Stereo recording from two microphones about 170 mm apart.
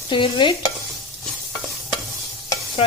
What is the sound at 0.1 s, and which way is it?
Speech, 30° left (ahead or behind).